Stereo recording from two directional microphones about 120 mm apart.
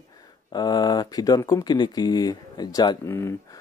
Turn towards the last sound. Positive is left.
turn(degrees=25)  # may be behind; listen again after turning